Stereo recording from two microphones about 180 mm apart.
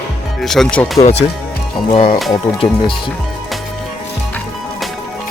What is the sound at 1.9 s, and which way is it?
Speech, 35° left (ahead or behind).